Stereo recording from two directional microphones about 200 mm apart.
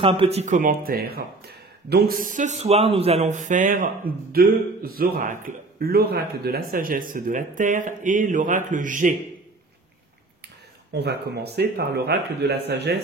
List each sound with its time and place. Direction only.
0.0 s speech: 25° right (ahead or behind)
10.9 s a man's voice: 55° right (ahead or behind)